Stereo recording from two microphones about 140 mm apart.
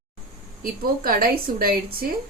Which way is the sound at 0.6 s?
90° right.